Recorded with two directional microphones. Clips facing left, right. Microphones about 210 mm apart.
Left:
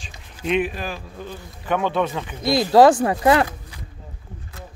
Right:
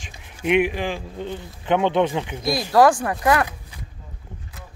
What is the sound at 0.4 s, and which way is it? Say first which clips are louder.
Speech: right 3 dB; 15° right (ahead or behind).